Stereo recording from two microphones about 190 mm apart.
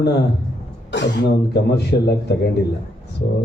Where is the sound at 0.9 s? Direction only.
65° left (ahead or behind).